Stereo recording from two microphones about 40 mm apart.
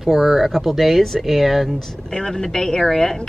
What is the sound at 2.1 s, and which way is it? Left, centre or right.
Speech, centre.